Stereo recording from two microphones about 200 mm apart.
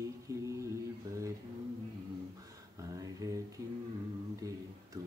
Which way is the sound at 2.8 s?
15° right (ahead or behind).